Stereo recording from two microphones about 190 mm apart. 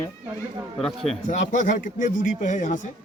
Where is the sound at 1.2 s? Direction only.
40° left (ahead or behind).